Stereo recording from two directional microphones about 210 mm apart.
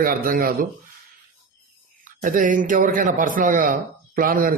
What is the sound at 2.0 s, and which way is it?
A man's voice, 40° right (ahead or behind).